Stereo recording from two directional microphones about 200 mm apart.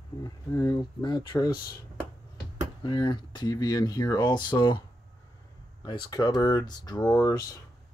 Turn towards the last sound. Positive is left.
turn(degrees=15)  # may be behind; listen again after turning